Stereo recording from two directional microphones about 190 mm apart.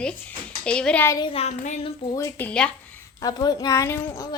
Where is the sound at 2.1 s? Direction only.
15° left (ahead or behind).